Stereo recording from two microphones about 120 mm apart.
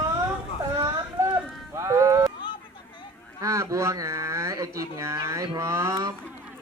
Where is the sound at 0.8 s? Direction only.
30° right (ahead or behind).